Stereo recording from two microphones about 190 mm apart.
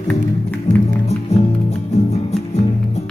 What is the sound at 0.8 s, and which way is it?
Music, 35° left (ahead or behind).